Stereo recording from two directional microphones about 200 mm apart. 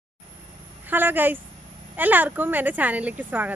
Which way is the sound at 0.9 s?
10° right (ahead or behind).